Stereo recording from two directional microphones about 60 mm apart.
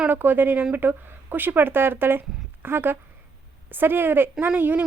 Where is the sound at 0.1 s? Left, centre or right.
Right.